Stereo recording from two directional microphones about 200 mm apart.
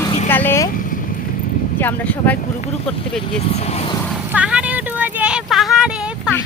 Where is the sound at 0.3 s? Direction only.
10° left (ahead or behind).